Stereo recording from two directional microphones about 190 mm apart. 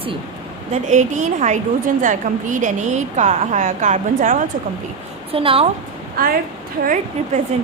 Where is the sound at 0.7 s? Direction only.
40° right (ahead or behind).